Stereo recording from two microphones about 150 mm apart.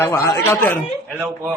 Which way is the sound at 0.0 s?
20° left (ahead or behind).